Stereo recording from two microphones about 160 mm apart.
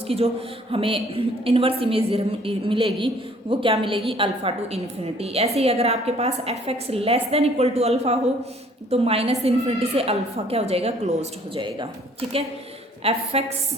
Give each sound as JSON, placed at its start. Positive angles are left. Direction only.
{"t": 0.1, "sound": "a woman's voice", "side_deg": -40}
{"t": 13.0, "sound": "a woman's voice", "side_deg": -40}